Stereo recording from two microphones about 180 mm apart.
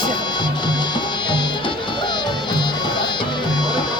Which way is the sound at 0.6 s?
25° left (ahead or behind).